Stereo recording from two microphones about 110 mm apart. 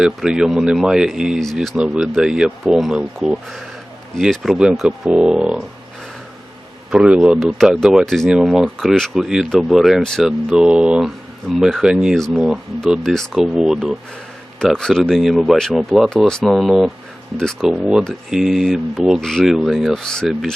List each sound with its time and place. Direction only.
0.0 s speech: 5° right (ahead or behind)
6.9 s speech: 10° right (ahead or behind)
7.3 s speech: centre (ahead or behind)
10.6 s speech: 10° right (ahead or behind)
12.8 s speech: centre (ahead or behind)
16.5 s speech: 5° right (ahead or behind)